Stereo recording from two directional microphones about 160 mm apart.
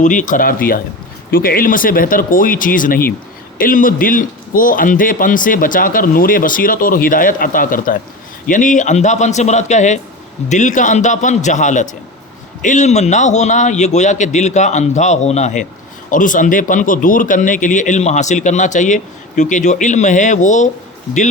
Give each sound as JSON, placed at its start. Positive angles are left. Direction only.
{"t": 0.0, "sound": "a man's voice", "side_deg": 50}